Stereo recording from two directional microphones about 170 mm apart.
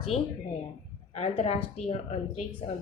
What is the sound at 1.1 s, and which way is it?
Speech, 40° left (ahead or behind).